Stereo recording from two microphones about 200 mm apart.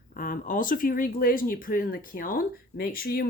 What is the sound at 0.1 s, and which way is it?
Speech, 45° left (ahead or behind).